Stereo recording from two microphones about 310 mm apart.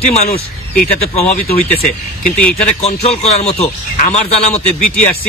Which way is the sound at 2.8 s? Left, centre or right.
Centre.